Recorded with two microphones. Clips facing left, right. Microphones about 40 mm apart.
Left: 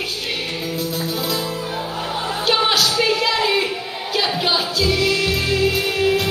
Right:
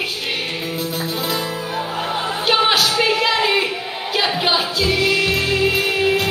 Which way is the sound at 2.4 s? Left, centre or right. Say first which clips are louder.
Right 2 dB; centre.